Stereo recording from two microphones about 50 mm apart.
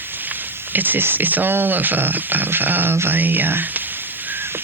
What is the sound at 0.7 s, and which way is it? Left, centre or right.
Speech, right.